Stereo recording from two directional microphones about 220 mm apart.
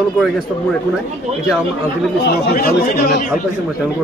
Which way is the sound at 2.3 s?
45° left (ahead or behind).